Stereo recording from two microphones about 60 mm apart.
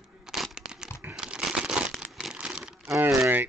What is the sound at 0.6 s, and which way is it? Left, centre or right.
Crumpling, centre.